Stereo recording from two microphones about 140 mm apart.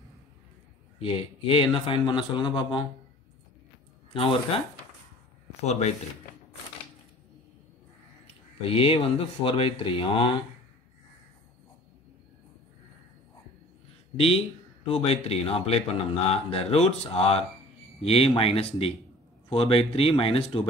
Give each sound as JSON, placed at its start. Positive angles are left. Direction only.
{"t": 1.0, "sound": "speech", "side_deg": 40}
{"t": 4.1, "sound": "speech", "side_deg": 40}
{"t": 5.6, "sound": "speech", "side_deg": 50}
{"t": 8.6, "sound": "speech", "side_deg": 45}
{"t": 14.1, "sound": "speech", "side_deg": 45}